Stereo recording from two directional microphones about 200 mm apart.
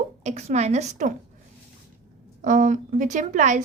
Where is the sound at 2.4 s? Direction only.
40° right (ahead or behind).